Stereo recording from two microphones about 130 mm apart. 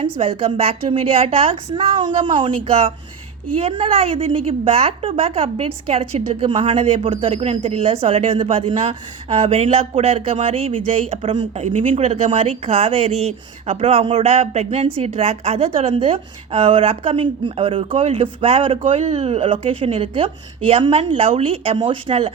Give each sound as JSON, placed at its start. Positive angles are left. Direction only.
{"t": 0.0, "sound": "speech", "side_deg": -45}
{"t": 11.6, "sound": "speech", "side_deg": -75}
{"t": 18.9, "sound": "speech", "side_deg": -70}